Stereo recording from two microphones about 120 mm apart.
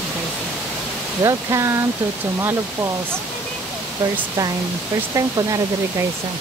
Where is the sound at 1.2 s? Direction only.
25° right (ahead or behind).